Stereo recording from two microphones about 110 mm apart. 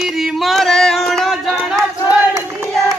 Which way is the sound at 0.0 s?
5° right (ahead or behind).